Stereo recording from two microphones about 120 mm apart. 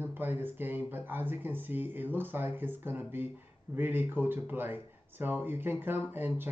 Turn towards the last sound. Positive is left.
turn(degrees=-15)  # may be behind; listen again after turning